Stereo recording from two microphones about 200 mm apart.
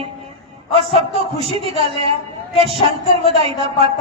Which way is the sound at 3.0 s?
30° left (ahead or behind).